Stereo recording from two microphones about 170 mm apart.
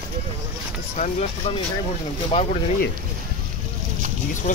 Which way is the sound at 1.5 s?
30° left (ahead or behind).